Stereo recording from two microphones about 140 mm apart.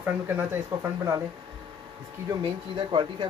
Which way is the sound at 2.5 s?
35° right (ahead or behind).